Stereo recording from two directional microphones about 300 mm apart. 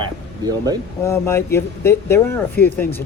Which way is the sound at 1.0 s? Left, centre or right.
Centre.